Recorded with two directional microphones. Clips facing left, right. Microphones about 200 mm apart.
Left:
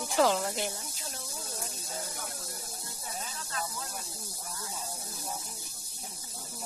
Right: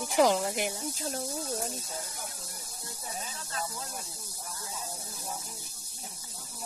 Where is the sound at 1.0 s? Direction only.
40° right (ahead or behind).